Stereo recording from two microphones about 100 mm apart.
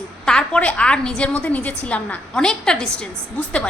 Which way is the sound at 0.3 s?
10° left (ahead or behind).